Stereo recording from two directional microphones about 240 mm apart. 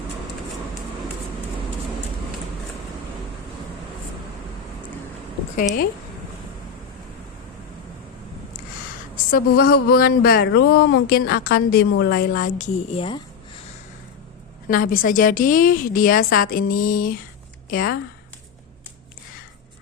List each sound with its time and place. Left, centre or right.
9.3 s speech: left
14.7 s speech: left